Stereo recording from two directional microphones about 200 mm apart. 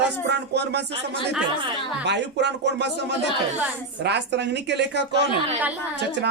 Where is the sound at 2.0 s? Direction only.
60° right (ahead or behind).